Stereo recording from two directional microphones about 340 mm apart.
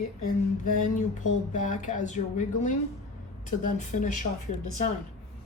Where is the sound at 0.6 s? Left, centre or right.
Left.